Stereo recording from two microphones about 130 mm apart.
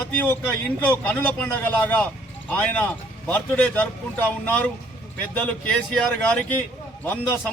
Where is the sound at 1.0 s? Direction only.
15° left (ahead or behind).